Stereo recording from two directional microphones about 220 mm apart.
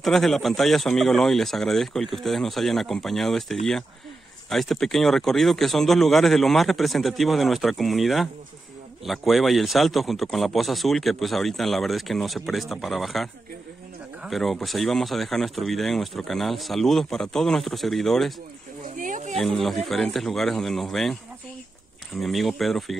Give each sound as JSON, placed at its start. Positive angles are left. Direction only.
{"t": 0.0, "sound": "speech", "side_deg": 0}
{"t": 18.9, "sound": "a sound", "side_deg": -35}
{"t": 19.3, "sound": "speech", "side_deg": 0}